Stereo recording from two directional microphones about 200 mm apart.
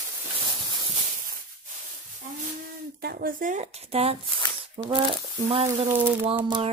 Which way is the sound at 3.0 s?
50° right (ahead or behind).